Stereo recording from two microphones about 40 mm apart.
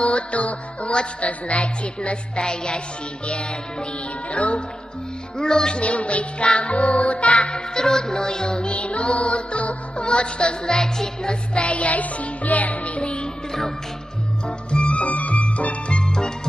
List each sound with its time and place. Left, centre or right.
0.0 s music: left
4.3 s music: left
5.4 s music: centre
5.8 s music: left
7.7 s music: centre
10.8 s music: centre
11.5 s music: left
13.0 s music: left
14.7 s music: left